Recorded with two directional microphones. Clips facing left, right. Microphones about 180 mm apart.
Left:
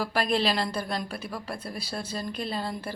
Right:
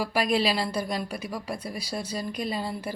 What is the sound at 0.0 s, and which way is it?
A woman's voice, 10° right (ahead or behind).